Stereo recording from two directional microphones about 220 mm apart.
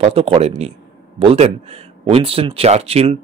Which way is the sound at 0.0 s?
25° right (ahead or behind).